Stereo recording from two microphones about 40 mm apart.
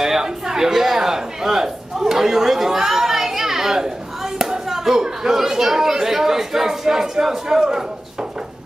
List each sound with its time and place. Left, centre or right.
0.0 s speech: centre